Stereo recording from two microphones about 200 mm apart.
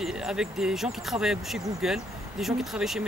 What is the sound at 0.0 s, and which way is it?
Speech, 5° right (ahead or behind).